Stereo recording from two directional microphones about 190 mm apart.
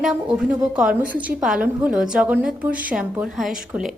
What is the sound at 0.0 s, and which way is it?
A woman's voice, 5° right (ahead or behind).